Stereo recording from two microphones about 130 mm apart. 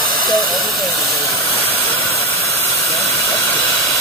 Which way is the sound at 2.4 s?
20° left (ahead or behind).